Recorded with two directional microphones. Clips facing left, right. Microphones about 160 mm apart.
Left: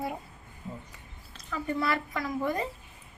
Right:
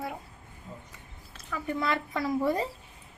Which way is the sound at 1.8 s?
20° right (ahead or behind).